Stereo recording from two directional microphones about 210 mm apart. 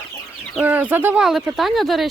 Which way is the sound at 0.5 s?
10° right (ahead or behind).